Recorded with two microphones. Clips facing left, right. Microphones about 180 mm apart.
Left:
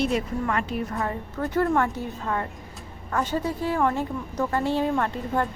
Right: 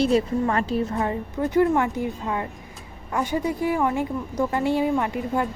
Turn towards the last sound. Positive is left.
turn(degrees=-10)  # may be behind; listen again after turning